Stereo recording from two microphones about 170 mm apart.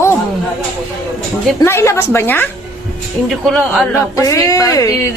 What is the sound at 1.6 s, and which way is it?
A woman's voice, 15° left (ahead or behind).